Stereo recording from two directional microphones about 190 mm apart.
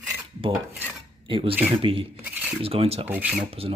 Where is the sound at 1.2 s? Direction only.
30° right (ahead or behind).